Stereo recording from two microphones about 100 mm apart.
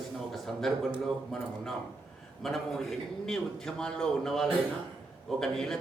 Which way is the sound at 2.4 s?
Centre (ahead or behind).